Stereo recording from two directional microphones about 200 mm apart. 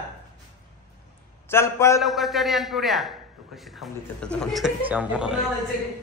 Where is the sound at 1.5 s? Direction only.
15° left (ahead or behind).